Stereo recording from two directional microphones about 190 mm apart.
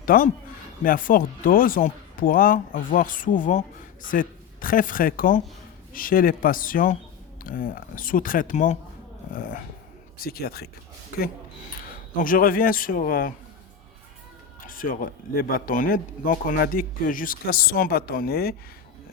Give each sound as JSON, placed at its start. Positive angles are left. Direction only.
{"t": 0.0, "sound": "speech", "side_deg": 50}
{"t": 14.6, "sound": "speech", "side_deg": 45}